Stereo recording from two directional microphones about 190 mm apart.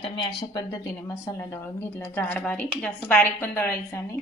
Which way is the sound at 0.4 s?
20° left (ahead or behind).